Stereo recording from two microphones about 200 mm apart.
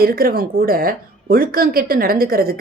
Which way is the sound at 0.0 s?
50° right (ahead or behind).